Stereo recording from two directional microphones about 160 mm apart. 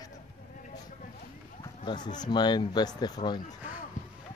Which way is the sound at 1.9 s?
25° left (ahead or behind).